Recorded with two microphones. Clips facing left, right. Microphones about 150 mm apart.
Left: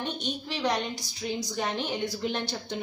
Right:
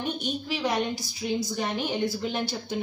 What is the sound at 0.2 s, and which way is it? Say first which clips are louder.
A woman's voice: right 2 dB; 5° right (ahead or behind).